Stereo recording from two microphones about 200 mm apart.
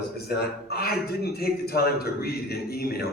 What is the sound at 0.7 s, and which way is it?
A man's voice, 50° left (ahead or behind).